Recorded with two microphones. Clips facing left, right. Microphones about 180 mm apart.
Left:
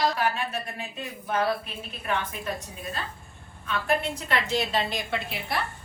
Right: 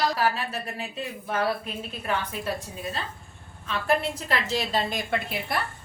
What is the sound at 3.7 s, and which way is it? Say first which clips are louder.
A woman's voice: right 1 dB; 35° right (ahead or behind).